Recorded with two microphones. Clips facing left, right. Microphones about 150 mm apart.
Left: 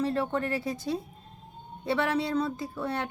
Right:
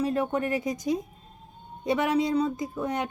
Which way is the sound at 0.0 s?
15° right (ahead or behind).